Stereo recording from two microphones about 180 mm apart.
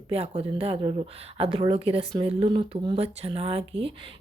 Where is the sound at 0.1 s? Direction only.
35° right (ahead or behind).